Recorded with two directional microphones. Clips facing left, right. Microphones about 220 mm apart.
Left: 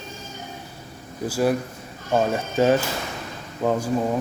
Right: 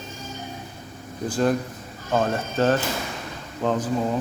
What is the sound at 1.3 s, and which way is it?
Speech, 10° left (ahead or behind).